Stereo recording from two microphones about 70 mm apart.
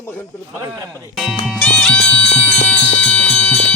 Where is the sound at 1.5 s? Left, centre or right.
Centre.